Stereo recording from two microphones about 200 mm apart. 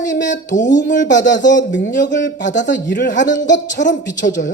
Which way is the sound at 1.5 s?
60° left (ahead or behind).